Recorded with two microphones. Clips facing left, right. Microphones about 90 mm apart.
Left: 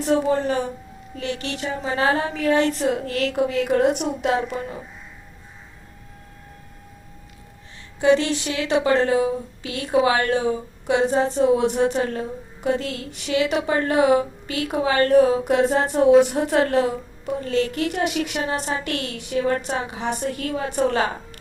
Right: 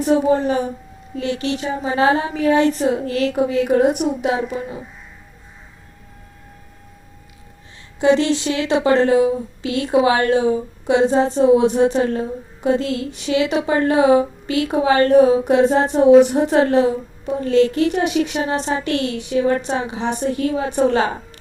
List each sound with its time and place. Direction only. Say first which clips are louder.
0.0 s a woman's voice: right 4 dB; 20° right (ahead or behind)
8.0 s a woman's voice: right 3 dB; 25° right (ahead or behind)